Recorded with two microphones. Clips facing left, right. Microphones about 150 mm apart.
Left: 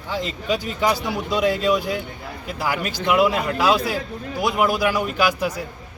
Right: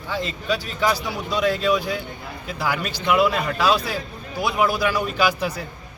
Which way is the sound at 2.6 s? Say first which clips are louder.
Left 1 dB; 10° left (ahead or behind).